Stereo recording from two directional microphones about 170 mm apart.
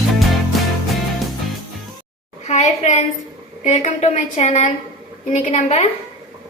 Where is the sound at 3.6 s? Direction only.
45° left (ahead or behind).